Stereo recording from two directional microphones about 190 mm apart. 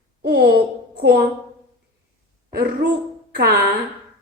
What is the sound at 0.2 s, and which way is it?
Speech, 55° right (ahead or behind).